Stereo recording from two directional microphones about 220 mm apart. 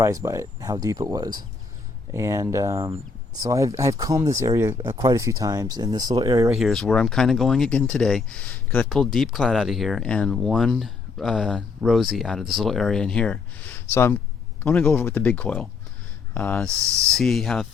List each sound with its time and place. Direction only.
0.0 s speech: 15° right (ahead or behind)
6.5 s speech: centre (ahead or behind)
16.6 s speech: 15° right (ahead or behind)
17.2 s speech: centre (ahead or behind)